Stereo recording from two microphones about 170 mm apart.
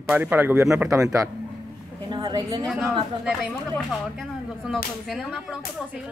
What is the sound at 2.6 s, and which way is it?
Speech, centre (ahead or behind).